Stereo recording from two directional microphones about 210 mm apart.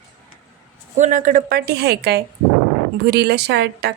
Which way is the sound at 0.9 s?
35° right (ahead or behind).